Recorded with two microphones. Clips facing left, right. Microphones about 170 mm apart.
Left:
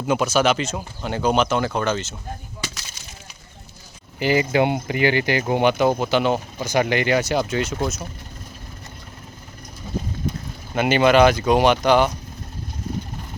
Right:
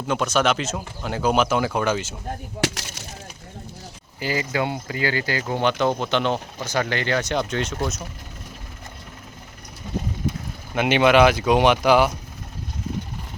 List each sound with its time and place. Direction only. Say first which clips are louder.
0.1 s speech: left 2 dB; 5° left (ahead or behind)
2.6 s a sound: right 10 dB; 90° right; by 3.1 s 70° right (ahead or behind)
4.2 s speech: left 6 dB; 25° left (ahead or behind); by 8.0 s 5° left (ahead or behind)
10.8 s speech: left 1 dB; centre (ahead or behind)